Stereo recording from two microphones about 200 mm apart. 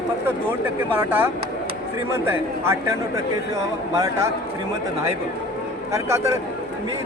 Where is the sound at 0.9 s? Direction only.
10° right (ahead or behind).